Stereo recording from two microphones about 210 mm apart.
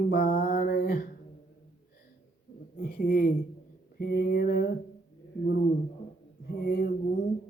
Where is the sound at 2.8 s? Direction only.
45° left (ahead or behind).